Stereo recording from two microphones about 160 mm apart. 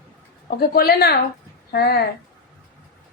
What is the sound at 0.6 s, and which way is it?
Speech, 70° left (ahead or behind).